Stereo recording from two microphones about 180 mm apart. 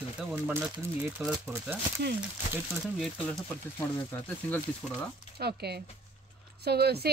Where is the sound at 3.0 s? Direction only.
Centre (ahead or behind).